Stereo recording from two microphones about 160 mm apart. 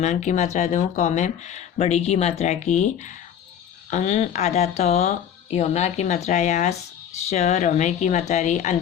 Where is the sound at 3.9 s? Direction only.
45° left (ahead or behind).